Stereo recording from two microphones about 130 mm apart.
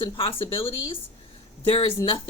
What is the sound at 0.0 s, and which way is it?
A man's voice, 40° left (ahead or behind).